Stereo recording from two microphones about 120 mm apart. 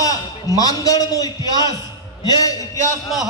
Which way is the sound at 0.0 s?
30° left (ahead or behind).